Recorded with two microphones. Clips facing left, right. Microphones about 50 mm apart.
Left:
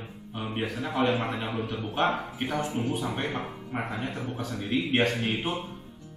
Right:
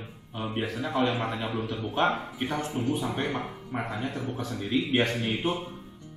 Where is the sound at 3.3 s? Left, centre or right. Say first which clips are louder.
Right 1 dB; centre.